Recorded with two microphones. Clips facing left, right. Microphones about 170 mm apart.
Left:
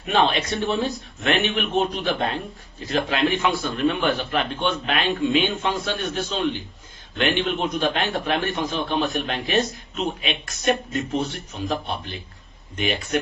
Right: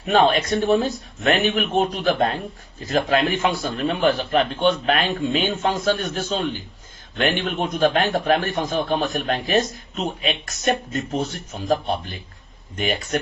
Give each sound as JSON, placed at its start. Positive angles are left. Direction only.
{"t": 0.1, "sound": "a man's voice", "side_deg": -45}